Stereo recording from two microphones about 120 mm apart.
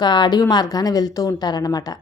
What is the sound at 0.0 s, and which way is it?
A woman's voice, 35° left (ahead or behind).